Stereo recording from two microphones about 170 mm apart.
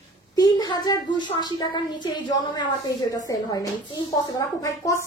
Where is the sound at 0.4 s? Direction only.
25° left (ahead or behind).